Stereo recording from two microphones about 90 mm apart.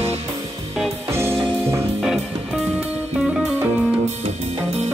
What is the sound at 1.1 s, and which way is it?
Music, 30° right (ahead or behind).